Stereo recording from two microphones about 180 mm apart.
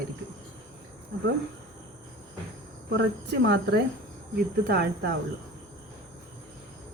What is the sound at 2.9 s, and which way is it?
Speech, 75° right (ahead or behind).